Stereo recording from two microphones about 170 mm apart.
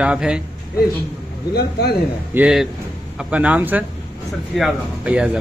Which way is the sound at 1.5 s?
70° left (ahead or behind).